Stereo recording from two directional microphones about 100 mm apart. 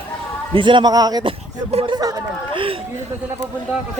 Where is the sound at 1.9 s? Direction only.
40° right (ahead or behind).